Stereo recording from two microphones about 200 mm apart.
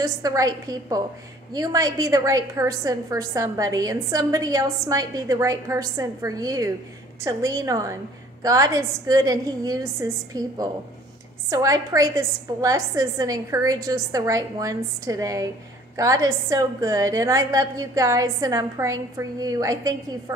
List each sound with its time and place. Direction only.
0.0 s a woman's voice: 15° right (ahead or behind)